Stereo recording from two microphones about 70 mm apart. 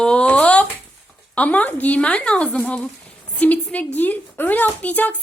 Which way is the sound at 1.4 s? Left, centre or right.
Left.